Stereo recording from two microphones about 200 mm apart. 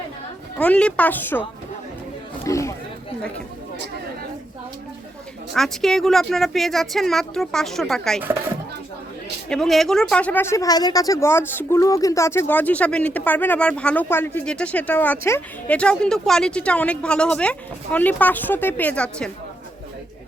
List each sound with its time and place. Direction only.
0.6 s speech: 5° left (ahead or behind)
2.4 s a sound: 15° left (ahead or behind)
5.5 s speech: centre (ahead or behind)
9.5 s speech: centre (ahead or behind)